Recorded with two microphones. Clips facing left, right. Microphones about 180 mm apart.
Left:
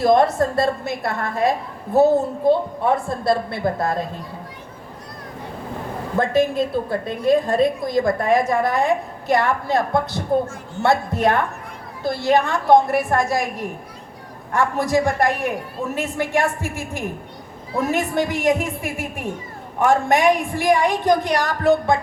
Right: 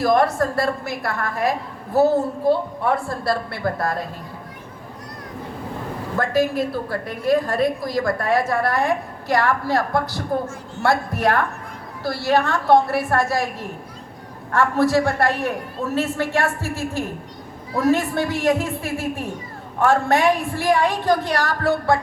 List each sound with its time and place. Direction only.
0.0 s a woman's voice: 25° left (ahead or behind)
6.1 s a woman's voice: 25° left (ahead or behind)